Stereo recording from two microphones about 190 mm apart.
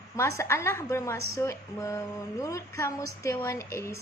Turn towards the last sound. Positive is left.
turn(degrees=15)  # may be behind; listen again after turning